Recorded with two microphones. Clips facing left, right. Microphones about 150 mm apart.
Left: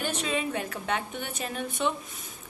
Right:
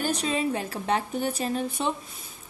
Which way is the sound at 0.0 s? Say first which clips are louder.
Right 3 dB; 35° right (ahead or behind).